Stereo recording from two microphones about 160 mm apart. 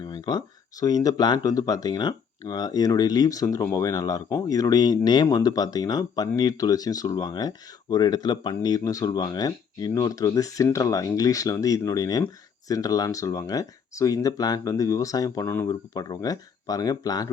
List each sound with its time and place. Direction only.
0.0 s speech: 25° left (ahead or behind)